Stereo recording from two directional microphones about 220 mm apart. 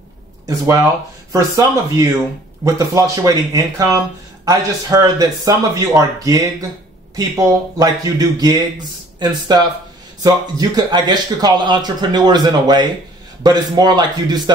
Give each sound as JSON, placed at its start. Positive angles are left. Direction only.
{"t": 1.3, "sound": "a man's voice", "side_deg": -15}